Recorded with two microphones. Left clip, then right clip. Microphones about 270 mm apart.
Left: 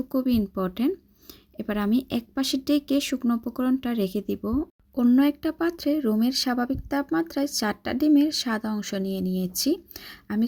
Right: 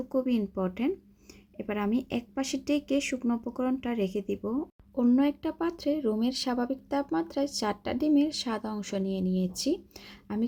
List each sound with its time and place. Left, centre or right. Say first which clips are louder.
0.1 s speech: left 3 dB; left